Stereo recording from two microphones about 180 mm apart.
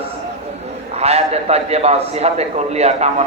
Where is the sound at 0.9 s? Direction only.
35° right (ahead or behind).